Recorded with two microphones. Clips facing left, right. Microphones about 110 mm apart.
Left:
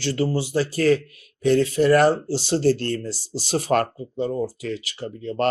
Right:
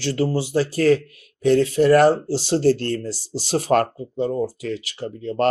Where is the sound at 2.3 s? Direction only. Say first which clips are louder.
Right 2 dB; 90° right.